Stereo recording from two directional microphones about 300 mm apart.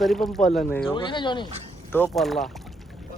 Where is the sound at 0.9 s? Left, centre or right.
Centre.